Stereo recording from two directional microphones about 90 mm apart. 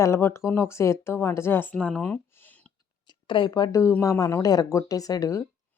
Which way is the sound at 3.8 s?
30° left (ahead or behind).